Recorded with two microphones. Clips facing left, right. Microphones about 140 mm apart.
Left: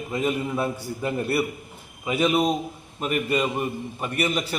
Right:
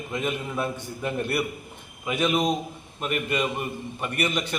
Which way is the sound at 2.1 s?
35° left (ahead or behind).